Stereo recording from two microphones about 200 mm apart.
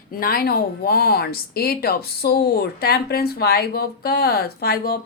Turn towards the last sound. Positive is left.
turn(degrees=50)  # may be behind; listen again after turning